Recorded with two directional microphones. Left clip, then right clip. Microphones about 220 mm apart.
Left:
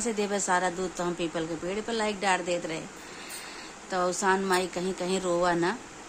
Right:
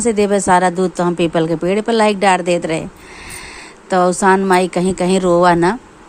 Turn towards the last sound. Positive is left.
turn(degrees=-35)  # may be behind; listen again after turning